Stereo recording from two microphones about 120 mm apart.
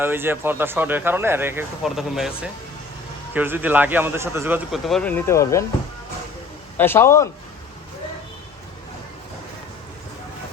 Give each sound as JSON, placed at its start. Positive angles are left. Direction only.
{"t": 0.0, "sound": "speech", "side_deg": -20}
{"t": 1.8, "sound": "speech", "side_deg": -5}
{"t": 3.3, "sound": "speech", "side_deg": -15}
{"t": 4.7, "sound": "speech", "side_deg": 0}
{"t": 5.0, "sound": "speech", "side_deg": 20}
{"t": 6.7, "sound": "speech", "side_deg": 20}